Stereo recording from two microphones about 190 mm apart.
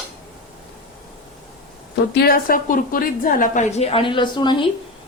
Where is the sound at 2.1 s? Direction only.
55° left (ahead or behind); by 4.7 s 25° left (ahead or behind).